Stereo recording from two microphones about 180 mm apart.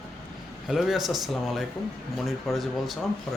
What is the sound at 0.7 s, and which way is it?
Speech, centre (ahead or behind).